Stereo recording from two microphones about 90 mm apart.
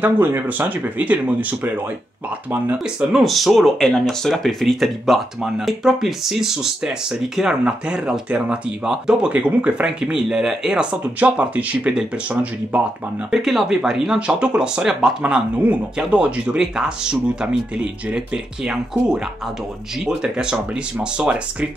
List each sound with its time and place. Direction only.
0.0 s speech: 25° right (ahead or behind)
2.8 s speech: 10° right (ahead or behind)